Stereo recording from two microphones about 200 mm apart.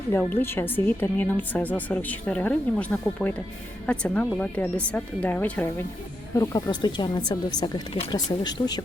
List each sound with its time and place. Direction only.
0.1 s speech: 10° left (ahead or behind)